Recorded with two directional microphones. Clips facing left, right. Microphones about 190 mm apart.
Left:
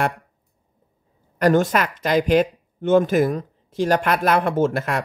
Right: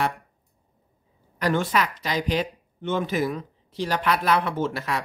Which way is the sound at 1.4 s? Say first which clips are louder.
Left 6 dB; 45° left (ahead or behind).